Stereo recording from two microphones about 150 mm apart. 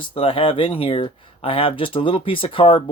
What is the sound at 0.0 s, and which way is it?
Speech, 35° left (ahead or behind).